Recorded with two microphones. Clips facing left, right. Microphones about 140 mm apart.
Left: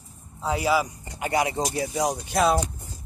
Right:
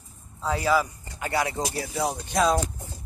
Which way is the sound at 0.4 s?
15° left (ahead or behind).